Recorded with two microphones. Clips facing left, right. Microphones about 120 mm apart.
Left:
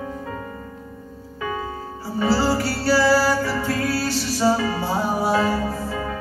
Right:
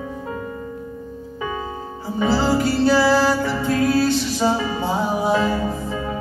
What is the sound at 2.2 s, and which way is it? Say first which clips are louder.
Music: right 2 dB; 20° right (ahead or behind).